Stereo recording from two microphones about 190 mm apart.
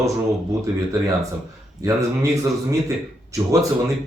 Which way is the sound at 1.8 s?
15° right (ahead or behind).